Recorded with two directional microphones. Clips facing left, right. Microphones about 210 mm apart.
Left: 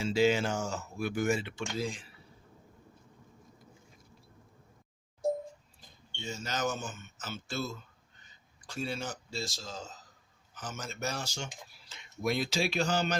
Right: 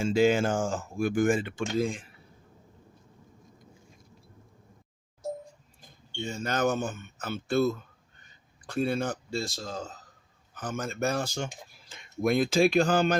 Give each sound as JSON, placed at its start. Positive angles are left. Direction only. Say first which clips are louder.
{"t": 0.0, "sound": "speech", "louder": "right 4 dB", "side_deg": -50}
{"t": 6.1, "sound": "speech", "louder": "right 6 dB", "side_deg": -55}